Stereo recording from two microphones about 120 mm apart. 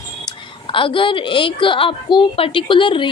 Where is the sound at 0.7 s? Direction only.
45° left (ahead or behind).